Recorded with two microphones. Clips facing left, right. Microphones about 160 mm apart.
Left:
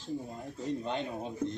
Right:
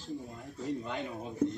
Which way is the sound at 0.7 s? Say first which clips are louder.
Left 2 dB; 25° left (ahead or behind).